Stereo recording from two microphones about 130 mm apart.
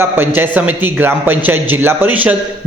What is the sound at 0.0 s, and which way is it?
A man's voice, 15° right (ahead or behind).